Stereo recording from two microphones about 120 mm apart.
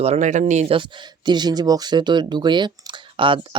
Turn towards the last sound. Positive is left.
turn(degrees=-45)  # may be behind; listen again after turning